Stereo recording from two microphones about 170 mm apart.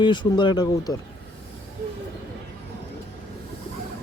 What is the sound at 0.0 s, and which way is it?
Speech, 25° left (ahead or behind).